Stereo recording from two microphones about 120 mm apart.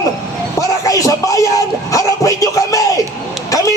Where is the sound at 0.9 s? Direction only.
30° left (ahead or behind).